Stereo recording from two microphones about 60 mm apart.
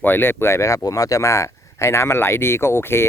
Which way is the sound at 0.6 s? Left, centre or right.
Left.